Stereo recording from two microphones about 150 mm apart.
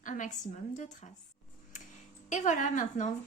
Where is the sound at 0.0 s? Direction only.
55° left (ahead or behind).